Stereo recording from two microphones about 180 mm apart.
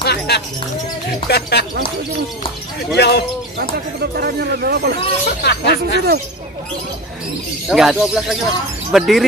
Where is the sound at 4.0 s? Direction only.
60° right (ahead or behind).